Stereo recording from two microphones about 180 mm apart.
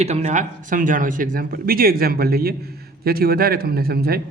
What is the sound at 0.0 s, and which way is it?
Speech, 35° right (ahead or behind).